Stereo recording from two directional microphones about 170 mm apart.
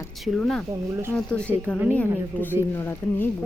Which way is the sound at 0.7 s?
15° right (ahead or behind).